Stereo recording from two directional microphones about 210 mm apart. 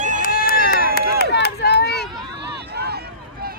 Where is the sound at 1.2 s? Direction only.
50° left (ahead or behind).